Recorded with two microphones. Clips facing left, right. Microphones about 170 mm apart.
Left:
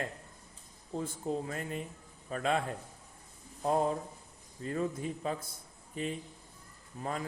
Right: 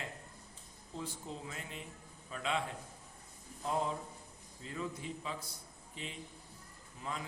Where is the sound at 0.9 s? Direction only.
50° left (ahead or behind).